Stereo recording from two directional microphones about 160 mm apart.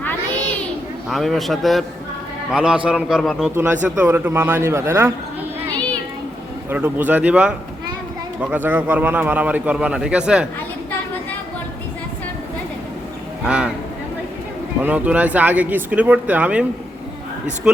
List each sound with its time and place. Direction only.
1.1 s a man's voice: centre (ahead or behind)
3.5 s a man's voice: 15° right (ahead or behind)
6.7 s a man's voice: 10° right (ahead or behind)
13.4 s speech: 5° right (ahead or behind)
14.8 s a man's voice: 10° right (ahead or behind)